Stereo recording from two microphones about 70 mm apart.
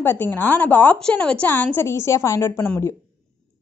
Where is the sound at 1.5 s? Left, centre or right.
Left.